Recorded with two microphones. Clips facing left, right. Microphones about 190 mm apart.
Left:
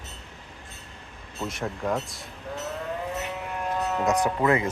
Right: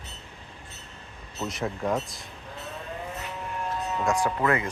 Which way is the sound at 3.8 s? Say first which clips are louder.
Left 5 dB; 65° left (ahead or behind).